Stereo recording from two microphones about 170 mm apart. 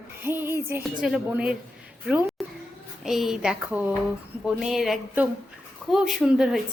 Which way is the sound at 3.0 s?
Centre (ahead or behind).